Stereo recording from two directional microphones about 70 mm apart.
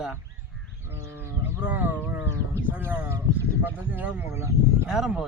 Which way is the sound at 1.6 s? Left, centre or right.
Right.